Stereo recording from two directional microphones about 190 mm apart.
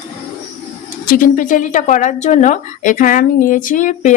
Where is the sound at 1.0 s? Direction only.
45° left (ahead or behind).